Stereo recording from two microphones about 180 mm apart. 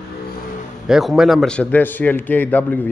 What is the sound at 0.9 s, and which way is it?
A man's voice, centre (ahead or behind).